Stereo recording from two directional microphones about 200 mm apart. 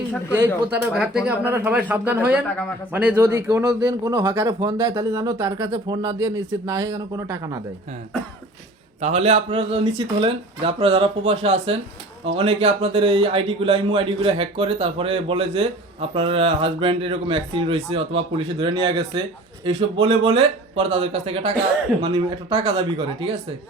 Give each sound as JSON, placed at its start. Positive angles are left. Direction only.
{"t": 0.3, "sound": "speech", "side_deg": -10}
{"t": 9.0, "sound": "speech", "side_deg": -35}